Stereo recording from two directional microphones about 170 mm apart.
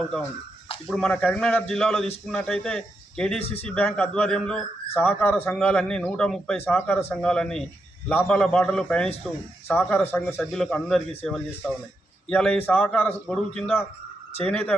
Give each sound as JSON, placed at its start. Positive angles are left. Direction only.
{"t": 0.9, "sound": "a man's voice", "side_deg": 5}
{"t": 3.4, "sound": "speech", "side_deg": 35}
{"t": 3.7, "sound": "a man's voice", "side_deg": 5}
{"t": 9.7, "sound": "a man's voice", "side_deg": 10}